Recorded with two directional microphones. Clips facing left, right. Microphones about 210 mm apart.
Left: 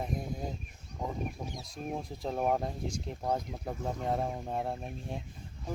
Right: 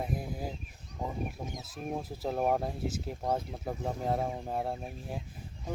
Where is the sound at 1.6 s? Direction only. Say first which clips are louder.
Right 1 dB; 5° right (ahead or behind).